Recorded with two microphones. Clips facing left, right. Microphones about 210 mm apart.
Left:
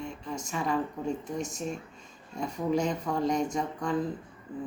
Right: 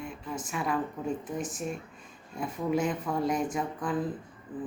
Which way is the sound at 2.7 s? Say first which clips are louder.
Even; 5° right (ahead or behind).